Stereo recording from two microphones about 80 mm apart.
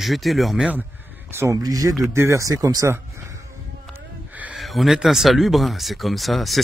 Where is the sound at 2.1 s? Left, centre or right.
Right.